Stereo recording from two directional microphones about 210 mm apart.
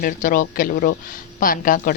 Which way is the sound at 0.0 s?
40° left (ahead or behind).